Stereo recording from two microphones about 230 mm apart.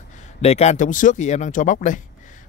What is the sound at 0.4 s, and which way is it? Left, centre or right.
A man's voice, left.